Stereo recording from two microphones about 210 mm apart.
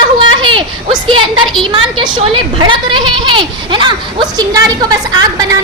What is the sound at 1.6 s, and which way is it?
A woman's voice, 25° right (ahead or behind).